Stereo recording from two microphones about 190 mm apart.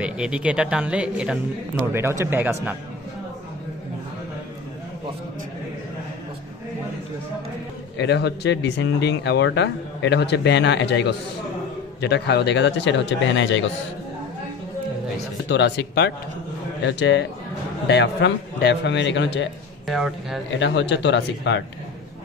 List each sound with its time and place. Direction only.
0.0 s speech: 5° right (ahead or behind)
8.0 s a man's voice: 65° left (ahead or behind)
15.4 s a man's voice: 65° left (ahead or behind)
19.9 s speech: centre (ahead or behind)
20.5 s a man's voice: 70° left (ahead or behind)